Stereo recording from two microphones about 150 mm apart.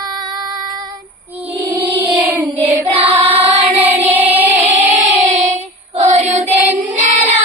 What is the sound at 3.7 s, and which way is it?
Music, 10° right (ahead or behind).